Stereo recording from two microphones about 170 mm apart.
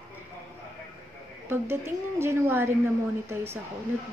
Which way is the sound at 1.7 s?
15° right (ahead or behind).